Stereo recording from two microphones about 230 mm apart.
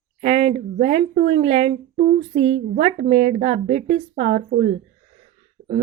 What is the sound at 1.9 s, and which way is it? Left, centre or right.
Female singing, right.